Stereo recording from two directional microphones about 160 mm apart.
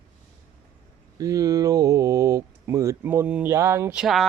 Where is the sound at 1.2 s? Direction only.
20° right (ahead or behind).